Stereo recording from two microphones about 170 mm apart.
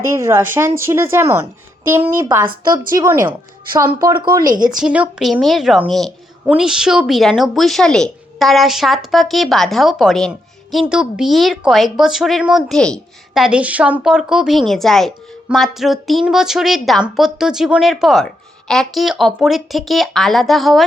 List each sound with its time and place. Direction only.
0.1 s speech: 15° right (ahead or behind)
4.8 s speech: 5° right (ahead or behind)